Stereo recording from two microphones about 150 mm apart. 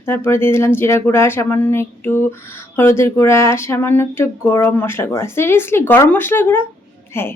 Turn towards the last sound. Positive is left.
turn(degrees=15)  # may be behind; listen again after turning